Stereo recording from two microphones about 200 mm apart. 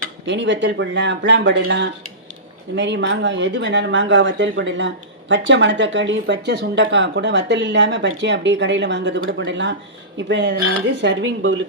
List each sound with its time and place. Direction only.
0.3 s speech: 65° right (ahead or behind)